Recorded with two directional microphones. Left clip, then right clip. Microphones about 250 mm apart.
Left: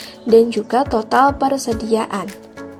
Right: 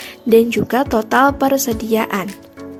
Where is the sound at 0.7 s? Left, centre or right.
Right.